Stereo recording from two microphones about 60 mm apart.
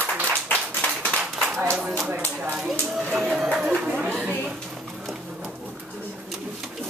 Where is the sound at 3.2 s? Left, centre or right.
Centre.